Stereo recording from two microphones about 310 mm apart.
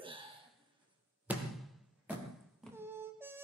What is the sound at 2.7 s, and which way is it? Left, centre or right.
Music, centre.